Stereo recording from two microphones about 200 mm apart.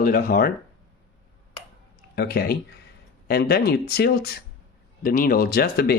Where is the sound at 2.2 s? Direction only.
50° left (ahead or behind).